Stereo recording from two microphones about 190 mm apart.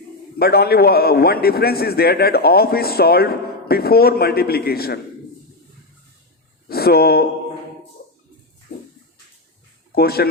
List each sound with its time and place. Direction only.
0.3 s a man's voice: 55° left (ahead or behind)
6.7 s speech: 55° left (ahead or behind)
9.9 s speech: 55° left (ahead or behind)